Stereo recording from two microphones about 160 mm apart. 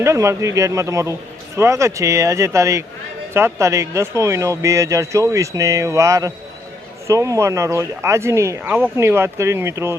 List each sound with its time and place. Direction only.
0.0 s speech: 20° right (ahead or behind)